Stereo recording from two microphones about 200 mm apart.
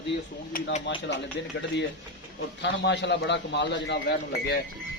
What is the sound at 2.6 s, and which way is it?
A man's voice, 60° left (ahead or behind).